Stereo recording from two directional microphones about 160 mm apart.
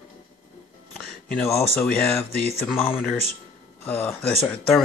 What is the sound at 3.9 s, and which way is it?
Speech, 15° left (ahead or behind).